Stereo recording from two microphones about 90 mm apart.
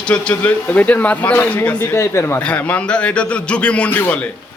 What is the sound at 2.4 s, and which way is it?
Speech, 15° left (ahead or behind).